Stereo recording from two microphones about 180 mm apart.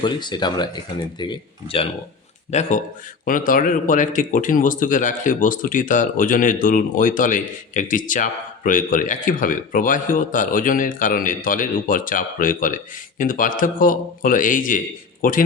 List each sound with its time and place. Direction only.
0.0 s speech: 25° left (ahead or behind)
2.5 s speech: 40° left (ahead or behind)